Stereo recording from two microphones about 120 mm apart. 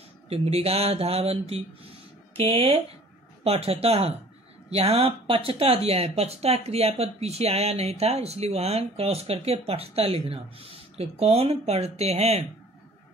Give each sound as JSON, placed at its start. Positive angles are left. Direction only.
{"t": 0.3, "sound": "speech", "side_deg": -55}